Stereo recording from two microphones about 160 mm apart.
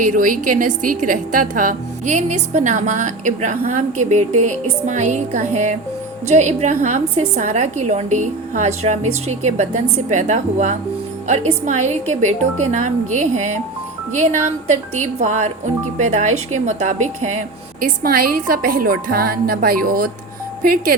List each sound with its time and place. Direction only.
0.0 s a woman's voice: 55° right (ahead or behind)